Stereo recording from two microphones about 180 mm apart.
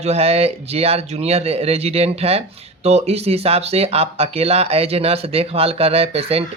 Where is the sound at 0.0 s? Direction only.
35° right (ahead or behind).